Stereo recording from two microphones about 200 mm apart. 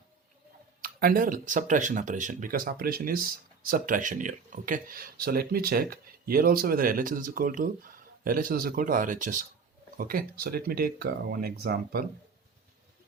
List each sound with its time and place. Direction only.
0.8 s speech: 45° right (ahead or behind)